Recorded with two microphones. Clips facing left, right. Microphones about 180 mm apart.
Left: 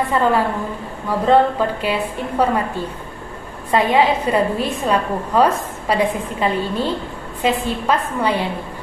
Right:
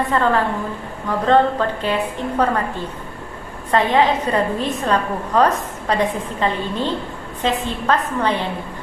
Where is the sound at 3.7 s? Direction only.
10° left (ahead or behind).